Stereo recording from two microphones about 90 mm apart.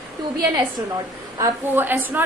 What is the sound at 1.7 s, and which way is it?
Speech, 20° right (ahead or behind).